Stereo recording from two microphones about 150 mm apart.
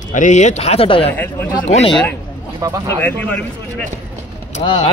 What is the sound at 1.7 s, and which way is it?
Speech, 45° left (ahead or behind).